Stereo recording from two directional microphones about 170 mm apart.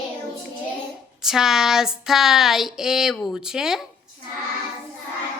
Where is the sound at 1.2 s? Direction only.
Centre (ahead or behind).